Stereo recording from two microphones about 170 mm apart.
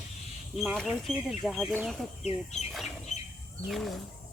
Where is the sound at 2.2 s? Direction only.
40° left (ahead or behind).